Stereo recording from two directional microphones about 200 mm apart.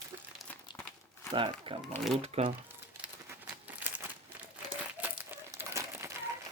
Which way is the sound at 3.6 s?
10° right (ahead or behind).